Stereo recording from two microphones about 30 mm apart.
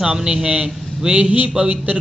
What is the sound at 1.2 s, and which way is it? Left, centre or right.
Mantra, right.